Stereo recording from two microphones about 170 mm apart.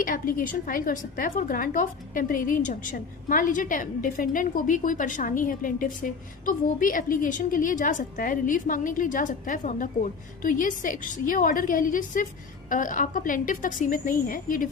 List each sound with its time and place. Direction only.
0.0 s a woman's voice: 55° left (ahead or behind)